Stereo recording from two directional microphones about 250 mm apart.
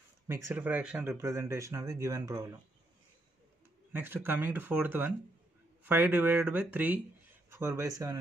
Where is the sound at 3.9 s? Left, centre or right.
Centre.